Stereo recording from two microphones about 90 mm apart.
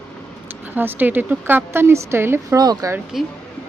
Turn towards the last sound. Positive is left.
turn(degrees=-5)  # may be behind; listen again after turning